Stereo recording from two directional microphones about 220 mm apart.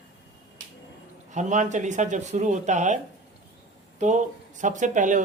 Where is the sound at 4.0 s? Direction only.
35° right (ahead or behind).